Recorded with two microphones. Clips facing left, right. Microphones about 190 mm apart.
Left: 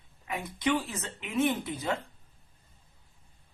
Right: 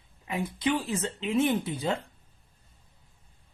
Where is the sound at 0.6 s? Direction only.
30° right (ahead or behind).